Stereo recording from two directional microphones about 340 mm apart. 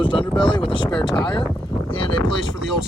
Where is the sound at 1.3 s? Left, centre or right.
Centre.